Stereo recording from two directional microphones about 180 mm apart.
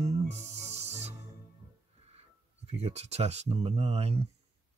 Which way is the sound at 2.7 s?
35° right (ahead or behind).